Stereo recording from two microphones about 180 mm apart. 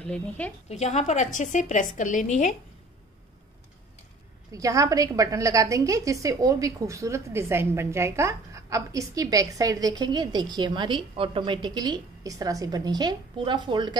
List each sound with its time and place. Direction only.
0.0 s a woman's voice: 5° left (ahead or behind)
0.7 s a woman's voice: 40° left (ahead or behind)
4.5 s a woman's voice: 20° right (ahead or behind)